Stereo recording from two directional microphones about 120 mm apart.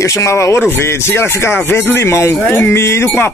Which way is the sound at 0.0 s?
25° left (ahead or behind).